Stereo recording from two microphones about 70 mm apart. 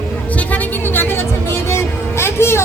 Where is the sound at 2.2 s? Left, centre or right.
Left.